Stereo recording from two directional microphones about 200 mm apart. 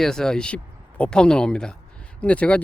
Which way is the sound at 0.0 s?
5° left (ahead or behind).